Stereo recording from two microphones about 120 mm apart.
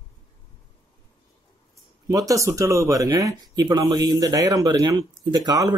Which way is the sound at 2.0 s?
30° right (ahead or behind).